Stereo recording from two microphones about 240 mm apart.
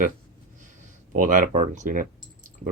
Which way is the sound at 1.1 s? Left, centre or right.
Right.